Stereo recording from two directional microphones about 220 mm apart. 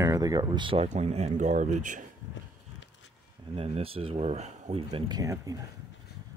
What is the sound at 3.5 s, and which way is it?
Speech, 25° right (ahead or behind).